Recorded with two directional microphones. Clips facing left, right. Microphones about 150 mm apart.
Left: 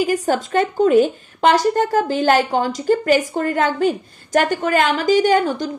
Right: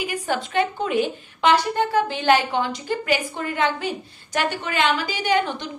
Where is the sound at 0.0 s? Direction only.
40° left (ahead or behind).